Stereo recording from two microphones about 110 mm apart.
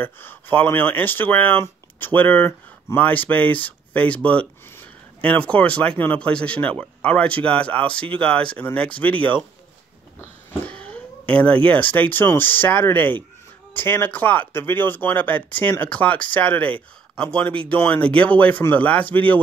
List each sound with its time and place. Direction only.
0.0 s speech: 20° left (ahead or behind)
10.7 s cat: 10° left (ahead or behind)
11.6 s speech: 15° left (ahead or behind)